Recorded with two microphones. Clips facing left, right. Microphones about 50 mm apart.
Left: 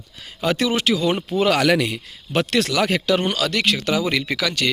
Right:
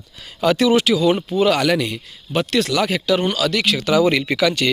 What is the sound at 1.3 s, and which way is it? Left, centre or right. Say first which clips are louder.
Speech: right 1 dB; left.